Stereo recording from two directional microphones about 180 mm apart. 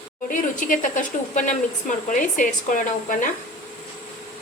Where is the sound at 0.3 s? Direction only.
45° left (ahead or behind).